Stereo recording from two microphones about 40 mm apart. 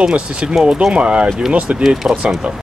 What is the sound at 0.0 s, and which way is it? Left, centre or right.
Speech, right.